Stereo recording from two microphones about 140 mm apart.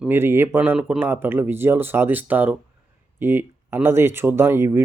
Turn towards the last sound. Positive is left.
turn(degrees=-20)  # may be behind; listen again after turning